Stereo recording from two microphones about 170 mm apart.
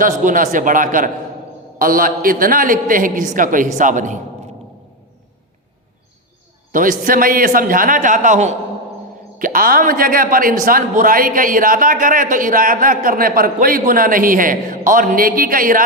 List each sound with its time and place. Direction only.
0.0 s a man's voice: 50° right (ahead or behind)
6.7 s a man's voice: 55° right (ahead or behind)